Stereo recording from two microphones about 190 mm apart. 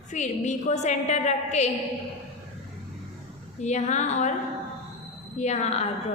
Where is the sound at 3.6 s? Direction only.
40° left (ahead or behind).